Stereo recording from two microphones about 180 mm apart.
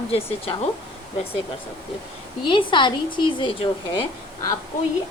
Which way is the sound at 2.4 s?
25° left (ahead or behind).